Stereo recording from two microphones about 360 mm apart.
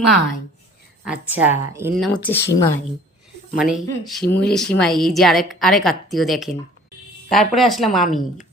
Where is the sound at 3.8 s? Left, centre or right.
Centre.